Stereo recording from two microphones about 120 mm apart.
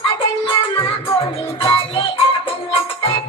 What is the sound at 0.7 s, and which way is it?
Music, 45° left (ahead or behind).